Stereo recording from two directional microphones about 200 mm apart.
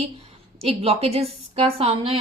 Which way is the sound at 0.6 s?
30° right (ahead or behind).